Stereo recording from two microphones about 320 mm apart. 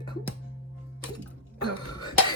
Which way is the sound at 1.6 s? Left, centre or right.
Centre.